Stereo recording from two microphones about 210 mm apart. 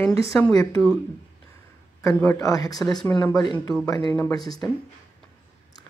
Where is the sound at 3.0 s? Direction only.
5° left (ahead or behind).